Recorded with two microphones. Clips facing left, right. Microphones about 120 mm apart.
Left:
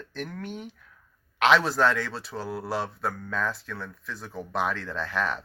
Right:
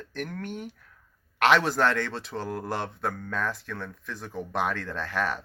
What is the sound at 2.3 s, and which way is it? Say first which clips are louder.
Speech: even; 5° left (ahead or behind).